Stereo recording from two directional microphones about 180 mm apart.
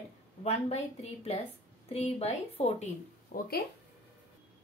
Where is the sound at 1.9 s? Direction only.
35° left (ahead or behind).